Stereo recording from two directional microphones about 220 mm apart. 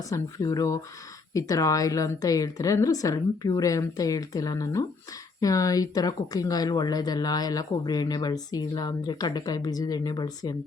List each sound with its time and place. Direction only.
0.1 s speech: 15° left (ahead or behind)